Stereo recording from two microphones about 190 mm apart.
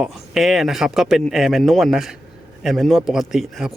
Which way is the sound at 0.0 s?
Centre (ahead or behind).